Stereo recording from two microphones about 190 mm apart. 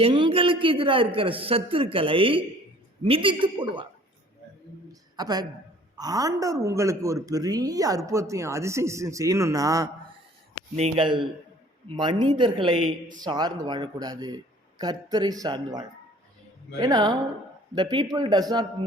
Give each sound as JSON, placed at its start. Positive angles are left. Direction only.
{"t": 0.0, "sound": "a man's voice", "side_deg": -25}
{"t": 4.9, "sound": "a sound", "side_deg": -20}
{"t": 6.0, "sound": "speech", "side_deg": -20}
{"t": 10.8, "sound": "a man's voice", "side_deg": -30}
{"t": 16.8, "sound": "a man's voice", "side_deg": -20}